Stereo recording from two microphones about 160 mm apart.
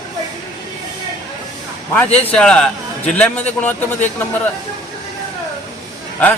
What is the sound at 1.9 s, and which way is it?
A man's voice, 10° left (ahead or behind).